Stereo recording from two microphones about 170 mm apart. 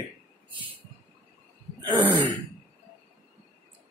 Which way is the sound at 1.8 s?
25° right (ahead or behind).